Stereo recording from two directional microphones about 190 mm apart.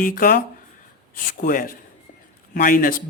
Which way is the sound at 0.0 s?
45° left (ahead or behind).